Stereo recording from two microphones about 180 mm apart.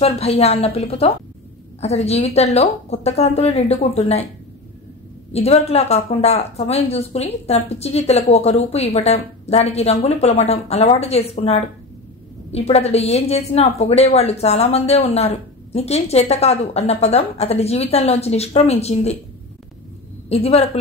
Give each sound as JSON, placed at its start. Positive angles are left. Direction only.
{"t": 0.0, "sound": "a woman's voice", "side_deg": 35}
{"t": 5.3, "sound": "a woman's voice", "side_deg": 35}
{"t": 20.2, "sound": "a woman's voice", "side_deg": 35}